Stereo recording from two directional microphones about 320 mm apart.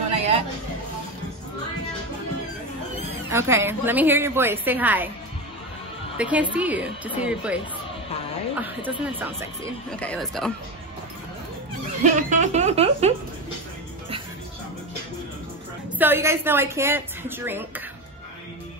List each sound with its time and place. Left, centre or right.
3.3 s a woman's voice: centre
6.1 s a woman's voice: centre
12.0 s speech: right
16.0 s a woman's voice: centre